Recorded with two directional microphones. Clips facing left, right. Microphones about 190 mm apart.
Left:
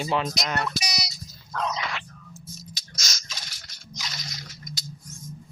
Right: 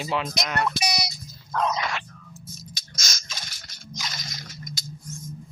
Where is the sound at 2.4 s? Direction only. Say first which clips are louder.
Right 1 dB; 50° right (ahead or behind).